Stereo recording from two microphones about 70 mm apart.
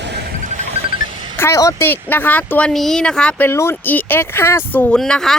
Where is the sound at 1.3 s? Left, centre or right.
Left.